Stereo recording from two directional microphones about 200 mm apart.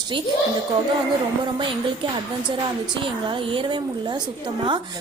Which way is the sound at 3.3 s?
25° right (ahead or behind).